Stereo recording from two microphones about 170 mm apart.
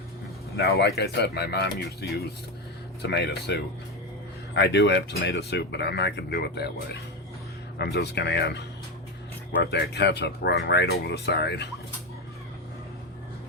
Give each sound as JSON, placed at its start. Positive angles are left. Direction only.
{"t": 0.5, "sound": "speech", "side_deg": 75}